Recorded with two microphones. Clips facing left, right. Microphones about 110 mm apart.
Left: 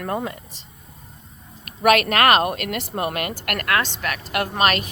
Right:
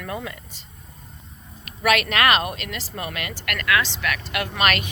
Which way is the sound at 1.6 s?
45° left (ahead or behind).